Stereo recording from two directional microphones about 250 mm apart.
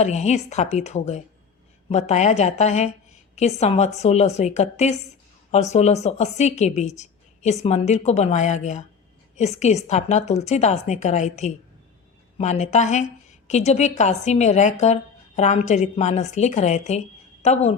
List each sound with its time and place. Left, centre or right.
0.0 s a woman's voice: left